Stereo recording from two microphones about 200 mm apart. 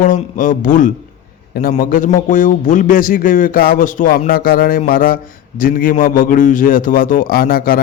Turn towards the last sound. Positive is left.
turn(degrees=45)  # may be behind; listen again after turning